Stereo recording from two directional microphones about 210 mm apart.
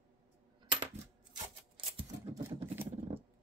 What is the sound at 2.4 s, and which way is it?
Vehicle, 10° right (ahead or behind).